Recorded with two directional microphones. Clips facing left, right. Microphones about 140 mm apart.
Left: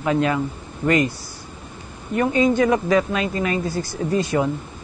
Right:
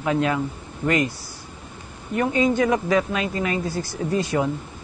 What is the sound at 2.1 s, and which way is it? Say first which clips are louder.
Speech: left 2 dB; 15° right (ahead or behind).